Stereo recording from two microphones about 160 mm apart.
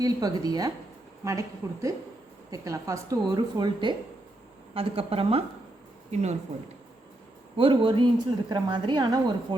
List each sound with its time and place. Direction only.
0.0 s a woman's voice: 25° right (ahead or behind)
7.5 s a woman's voice: 35° right (ahead or behind)